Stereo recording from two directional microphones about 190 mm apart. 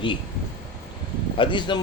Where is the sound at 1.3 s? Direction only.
25° left (ahead or behind).